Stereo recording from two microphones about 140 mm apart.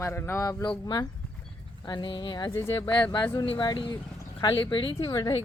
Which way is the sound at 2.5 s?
20° left (ahead or behind).